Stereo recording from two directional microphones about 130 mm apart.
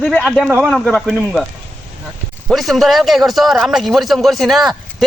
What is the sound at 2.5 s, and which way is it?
Speech, centre (ahead or behind).